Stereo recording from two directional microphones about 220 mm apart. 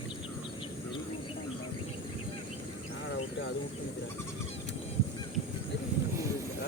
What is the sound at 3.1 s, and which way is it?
Bird, 55° left (ahead or behind).